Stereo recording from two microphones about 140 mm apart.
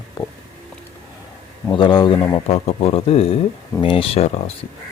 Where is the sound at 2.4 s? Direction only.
45° left (ahead or behind).